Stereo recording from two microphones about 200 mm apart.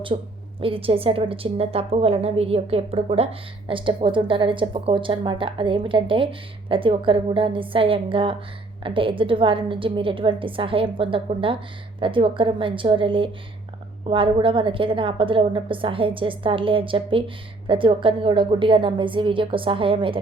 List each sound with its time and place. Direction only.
0.1 s a woman's voice: 35° right (ahead or behind)